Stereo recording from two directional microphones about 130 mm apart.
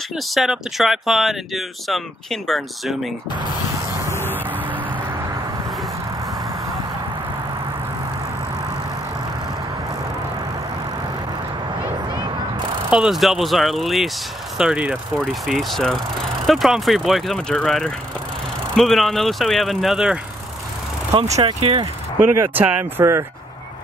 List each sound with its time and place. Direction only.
0.3 s speech: centre (ahead or behind)
4.1 s music: 15° left (ahead or behind)
12.9 s speech: 5° right (ahead or behind)
21.1 s speech: 35° right (ahead or behind)
22.4 s speech: 15° right (ahead or behind)